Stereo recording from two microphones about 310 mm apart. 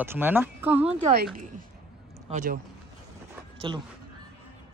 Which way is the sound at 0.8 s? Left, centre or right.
Right.